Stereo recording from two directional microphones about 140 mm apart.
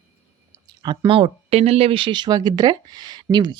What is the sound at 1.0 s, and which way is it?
Speech, 40° right (ahead or behind).